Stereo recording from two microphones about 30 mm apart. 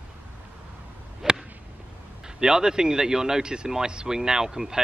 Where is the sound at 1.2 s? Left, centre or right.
Centre.